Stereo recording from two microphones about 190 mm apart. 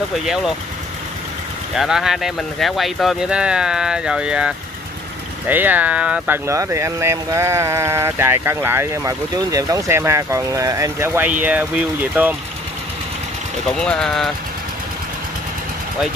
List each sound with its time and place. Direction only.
0.1 s speech: centre (ahead or behind)
1.8 s speech: centre (ahead or behind)
13.7 s speech: 5° left (ahead or behind)